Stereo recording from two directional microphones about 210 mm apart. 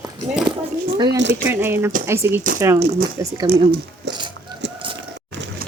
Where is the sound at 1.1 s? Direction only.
55° right (ahead or behind).